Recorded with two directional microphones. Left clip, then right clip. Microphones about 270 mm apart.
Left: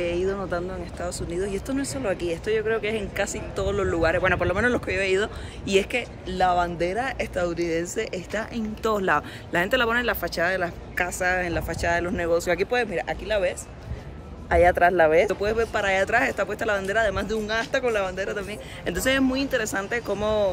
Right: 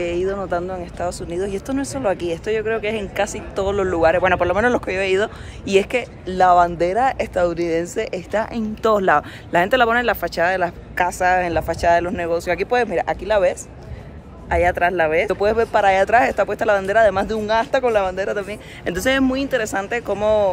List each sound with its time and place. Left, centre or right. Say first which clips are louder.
0.0 s speech: right 4 dB; centre
12.6 s speech: right 6 dB; centre
14.5 s speech: right 1 dB; centre
15.2 s speech: right 6 dB; centre